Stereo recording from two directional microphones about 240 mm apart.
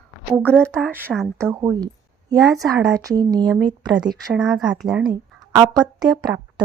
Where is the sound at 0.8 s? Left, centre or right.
Centre.